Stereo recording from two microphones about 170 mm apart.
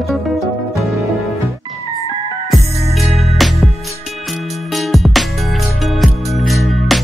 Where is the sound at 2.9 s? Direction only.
Centre (ahead or behind).